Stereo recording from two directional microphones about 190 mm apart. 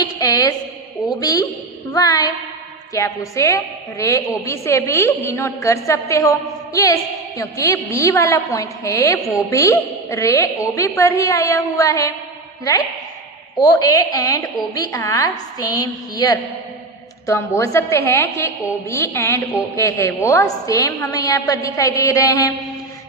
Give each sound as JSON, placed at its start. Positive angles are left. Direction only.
{"t": 0.2, "sound": "a sound", "side_deg": 15}
{"t": 1.2, "sound": "a woman's voice", "side_deg": 20}
{"t": 13.6, "sound": "a woman's voice", "side_deg": 20}